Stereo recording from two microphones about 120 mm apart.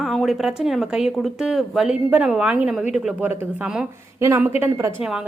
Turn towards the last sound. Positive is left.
turn(degrees=-20)  # may be behind; listen again after turning